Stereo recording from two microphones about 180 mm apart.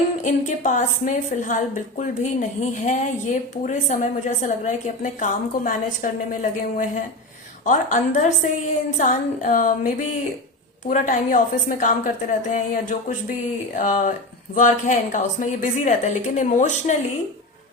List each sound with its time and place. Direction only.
0.3 s a woman's voice: 45° left (ahead or behind)